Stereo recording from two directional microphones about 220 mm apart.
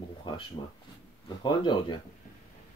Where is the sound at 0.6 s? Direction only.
25° left (ahead or behind).